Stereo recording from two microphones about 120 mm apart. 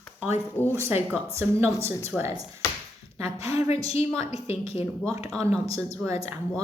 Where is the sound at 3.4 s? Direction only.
60° left (ahead or behind).